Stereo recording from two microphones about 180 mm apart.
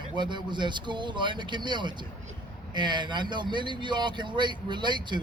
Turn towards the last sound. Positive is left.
turn(degrees=-25)  # may be behind; listen again after turning